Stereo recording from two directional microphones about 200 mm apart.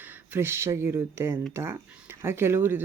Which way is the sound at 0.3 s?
10° right (ahead or behind).